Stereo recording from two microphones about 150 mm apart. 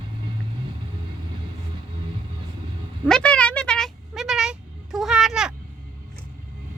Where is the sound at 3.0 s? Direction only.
5° left (ahead or behind).